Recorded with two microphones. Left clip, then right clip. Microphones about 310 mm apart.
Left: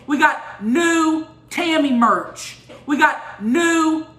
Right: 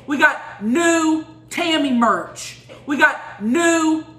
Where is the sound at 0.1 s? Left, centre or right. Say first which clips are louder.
Even; centre.